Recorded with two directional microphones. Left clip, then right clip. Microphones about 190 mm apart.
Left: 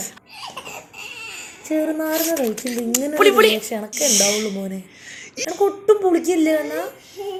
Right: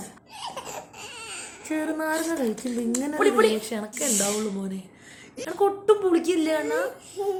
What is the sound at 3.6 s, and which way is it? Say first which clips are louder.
A woman's voice: left 7 dB; 10° left (ahead or behind).